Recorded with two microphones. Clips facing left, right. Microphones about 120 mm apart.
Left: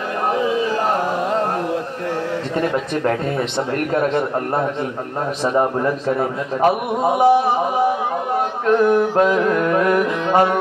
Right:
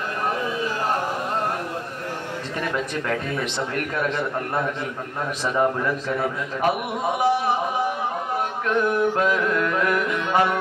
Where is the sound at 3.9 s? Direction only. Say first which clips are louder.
Left 8 dB; 40° left (ahead or behind).